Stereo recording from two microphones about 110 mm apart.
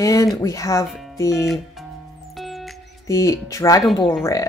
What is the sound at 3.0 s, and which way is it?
Speech, 30° left (ahead or behind).